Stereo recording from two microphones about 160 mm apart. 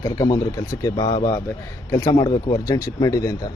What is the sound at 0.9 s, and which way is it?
Speech, 35° left (ahead or behind).